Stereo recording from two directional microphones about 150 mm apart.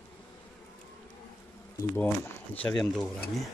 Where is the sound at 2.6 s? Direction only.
5° left (ahead or behind).